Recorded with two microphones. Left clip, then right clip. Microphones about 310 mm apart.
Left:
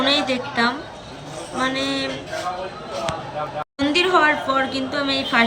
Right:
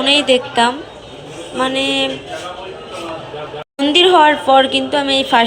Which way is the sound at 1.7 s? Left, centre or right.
Right.